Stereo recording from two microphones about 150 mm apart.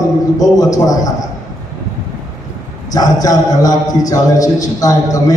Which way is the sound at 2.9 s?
25° left (ahead or behind).